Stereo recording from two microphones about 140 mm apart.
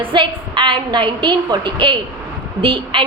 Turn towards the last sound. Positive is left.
turn(degrees=-40)  # may be behind; listen again after turning